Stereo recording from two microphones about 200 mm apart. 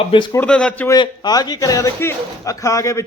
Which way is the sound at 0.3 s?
5° left (ahead or behind).